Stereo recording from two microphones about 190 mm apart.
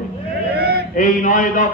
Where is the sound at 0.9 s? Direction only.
45° left (ahead or behind).